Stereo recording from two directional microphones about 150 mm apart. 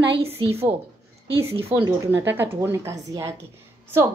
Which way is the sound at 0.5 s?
15° right (ahead or behind).